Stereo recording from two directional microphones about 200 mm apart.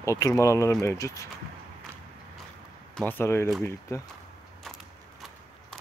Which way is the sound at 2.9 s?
10° left (ahead or behind).